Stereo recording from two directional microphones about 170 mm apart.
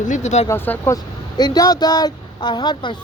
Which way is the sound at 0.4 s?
15° left (ahead or behind).